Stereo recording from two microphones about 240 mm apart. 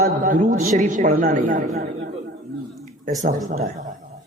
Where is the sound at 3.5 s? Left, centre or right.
Right.